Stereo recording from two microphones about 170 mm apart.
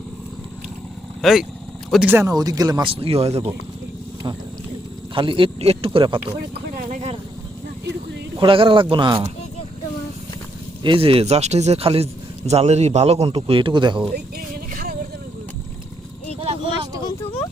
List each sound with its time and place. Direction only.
1.2 s speech: centre (ahead or behind); by 3.5 s 35° right (ahead or behind)
5.1 s a man's voice: 30° right (ahead or behind)
6.7 s a sound: 50° right (ahead or behind)
8.4 s speech: 30° right (ahead or behind)
10.8 s a man's voice: 35° right (ahead or behind)
14.1 s a sound: 65° right (ahead or behind)
16.3 s vehicle: 35° right (ahead or behind)